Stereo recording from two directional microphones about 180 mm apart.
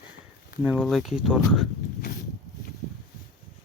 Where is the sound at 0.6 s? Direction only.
5° right (ahead or behind).